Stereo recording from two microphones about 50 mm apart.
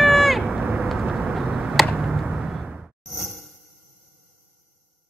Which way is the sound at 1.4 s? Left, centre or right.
Centre.